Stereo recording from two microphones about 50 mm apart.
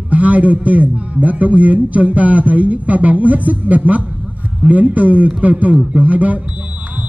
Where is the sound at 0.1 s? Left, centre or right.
Right.